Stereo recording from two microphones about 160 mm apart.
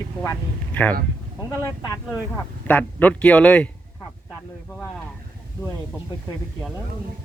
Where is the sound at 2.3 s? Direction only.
10° left (ahead or behind).